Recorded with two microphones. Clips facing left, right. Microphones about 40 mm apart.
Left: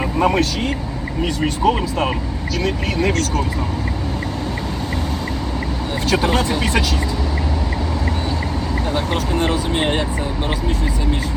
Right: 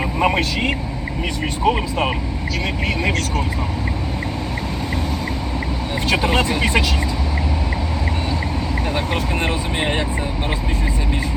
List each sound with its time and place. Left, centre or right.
0.2 s speech: right
3.0 s speech: right
6.1 s speech: right
9.1 s speech: right